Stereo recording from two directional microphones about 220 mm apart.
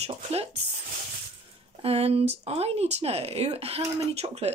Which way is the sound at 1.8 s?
25° right (ahead or behind).